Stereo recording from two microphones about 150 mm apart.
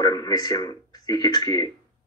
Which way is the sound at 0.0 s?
25° left (ahead or behind).